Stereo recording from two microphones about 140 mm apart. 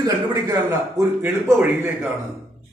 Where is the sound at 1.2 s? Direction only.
15° right (ahead or behind).